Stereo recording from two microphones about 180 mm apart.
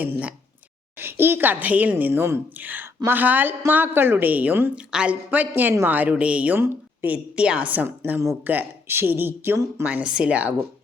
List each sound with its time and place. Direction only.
0.0 s a woman's voice: 5° right (ahead or behind)